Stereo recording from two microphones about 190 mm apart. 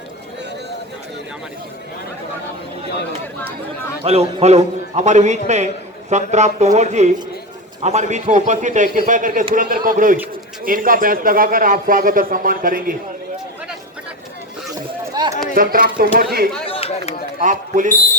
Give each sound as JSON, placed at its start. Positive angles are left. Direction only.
{"t": 4.0, "sound": "a man's voice", "side_deg": -35}
{"t": 15.1, "sound": "run", "side_deg": -20}
{"t": 15.5, "sound": "a man's voice", "side_deg": -50}
{"t": 16.6, "sound": "a sound", "side_deg": 30}
{"t": 17.4, "sound": "a man's voice", "side_deg": -45}